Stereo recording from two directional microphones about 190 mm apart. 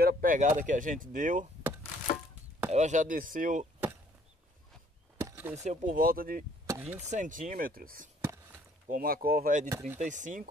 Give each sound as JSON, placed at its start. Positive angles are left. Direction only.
{"t": 0.0, "sound": "speech", "side_deg": -45}
{"t": 2.7, "sound": "speech", "side_deg": -40}
{"t": 5.1, "sound": "a sound", "side_deg": -10}
{"t": 5.6, "sound": "speech", "side_deg": -40}
{"t": 6.7, "sound": "chop", "side_deg": -10}
{"t": 7.0, "sound": "speech", "side_deg": -40}
{"t": 9.7, "sound": "speech", "side_deg": -15}
{"t": 9.9, "sound": "speech", "side_deg": -40}